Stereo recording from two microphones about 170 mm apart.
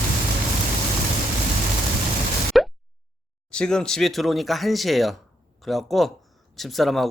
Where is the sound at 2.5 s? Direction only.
Centre (ahead or behind).